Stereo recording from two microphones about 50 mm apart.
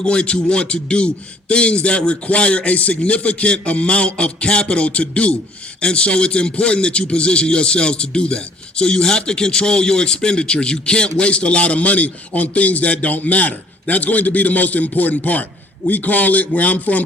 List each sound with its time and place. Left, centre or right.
0.0 s a man's voice: centre